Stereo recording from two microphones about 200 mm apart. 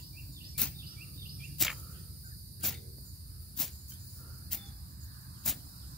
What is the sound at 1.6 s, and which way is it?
Cricket, centre (ahead or behind).